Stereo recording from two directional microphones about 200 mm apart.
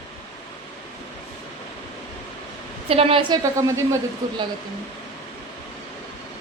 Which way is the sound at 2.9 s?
30° right (ahead or behind).